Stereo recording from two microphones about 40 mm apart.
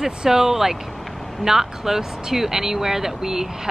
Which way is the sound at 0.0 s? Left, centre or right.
Centre.